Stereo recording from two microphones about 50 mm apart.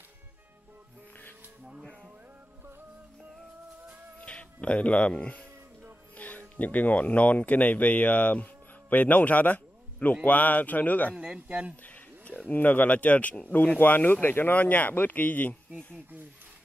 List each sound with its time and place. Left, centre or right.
4.2 s speech: left
11.1 s speech: right
11.8 s a sound: left
12.4 s speech: left